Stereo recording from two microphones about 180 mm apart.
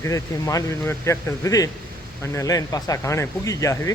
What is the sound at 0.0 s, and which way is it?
Speech, 20° left (ahead or behind).